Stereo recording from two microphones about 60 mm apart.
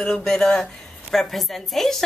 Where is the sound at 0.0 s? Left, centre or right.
Centre.